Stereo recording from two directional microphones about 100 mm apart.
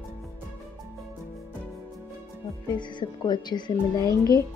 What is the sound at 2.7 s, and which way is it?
Speech, 50° left (ahead or behind).